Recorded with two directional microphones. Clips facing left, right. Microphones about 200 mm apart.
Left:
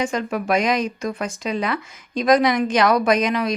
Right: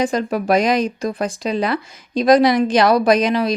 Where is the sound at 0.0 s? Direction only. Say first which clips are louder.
Right 4 dB; 35° right (ahead or behind).